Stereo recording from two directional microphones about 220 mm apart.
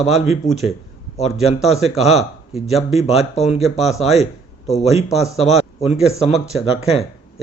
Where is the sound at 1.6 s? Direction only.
Centre (ahead or behind).